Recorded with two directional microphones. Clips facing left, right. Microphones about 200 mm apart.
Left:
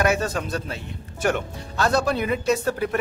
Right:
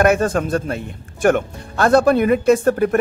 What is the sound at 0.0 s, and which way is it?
Speech, 50° right (ahead or behind).